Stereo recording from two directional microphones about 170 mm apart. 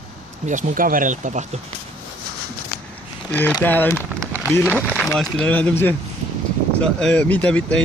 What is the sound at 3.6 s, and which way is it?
Speech, 10° left (ahead or behind).